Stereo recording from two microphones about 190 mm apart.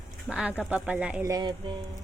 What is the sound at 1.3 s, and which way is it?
Speech, 20° right (ahead or behind).